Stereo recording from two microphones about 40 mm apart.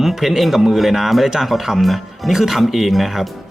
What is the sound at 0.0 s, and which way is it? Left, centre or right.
Speech, centre.